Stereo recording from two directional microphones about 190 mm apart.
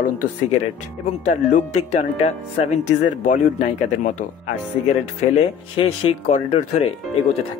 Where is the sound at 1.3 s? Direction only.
40° left (ahead or behind).